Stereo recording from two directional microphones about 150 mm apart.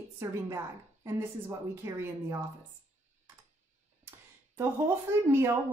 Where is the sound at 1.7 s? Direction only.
20° right (ahead or behind).